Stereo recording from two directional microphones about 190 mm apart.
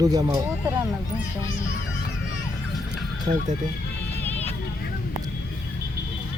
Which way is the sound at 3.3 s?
30° right (ahead or behind).